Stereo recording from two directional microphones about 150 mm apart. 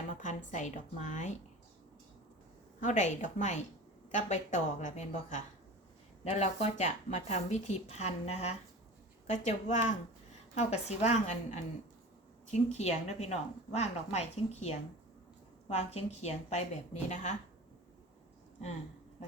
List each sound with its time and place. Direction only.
0.1 s a woman's voice: 55° left (ahead or behind)
2.8 s speech: 55° left (ahead or behind)